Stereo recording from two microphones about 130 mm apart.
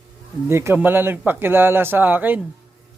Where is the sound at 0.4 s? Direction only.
20° right (ahead or behind).